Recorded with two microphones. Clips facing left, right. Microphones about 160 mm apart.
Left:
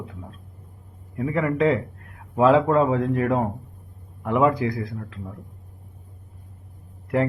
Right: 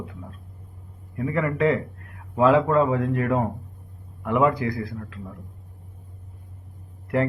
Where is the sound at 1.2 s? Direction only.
15° left (ahead or behind).